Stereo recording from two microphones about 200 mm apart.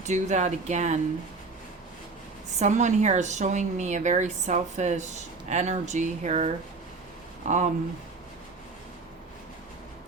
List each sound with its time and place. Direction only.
0.0 s a woman's voice: 35° right (ahead or behind)
2.6 s a woman's voice: 35° right (ahead or behind)